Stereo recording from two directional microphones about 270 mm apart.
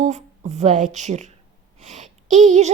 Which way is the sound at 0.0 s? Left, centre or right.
Right.